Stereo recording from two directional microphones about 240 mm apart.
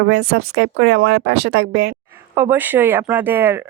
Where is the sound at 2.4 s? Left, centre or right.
Centre.